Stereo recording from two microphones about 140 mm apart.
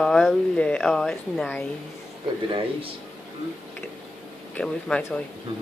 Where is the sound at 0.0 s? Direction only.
Centre (ahead or behind).